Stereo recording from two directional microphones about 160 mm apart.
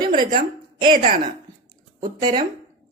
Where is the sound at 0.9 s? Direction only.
60° right (ahead or behind).